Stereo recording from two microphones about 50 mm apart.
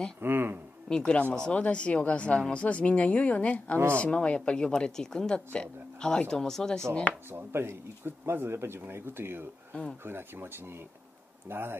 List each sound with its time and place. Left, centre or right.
0.2 s speech: right
0.8 s speech: centre
7.2 s speech: right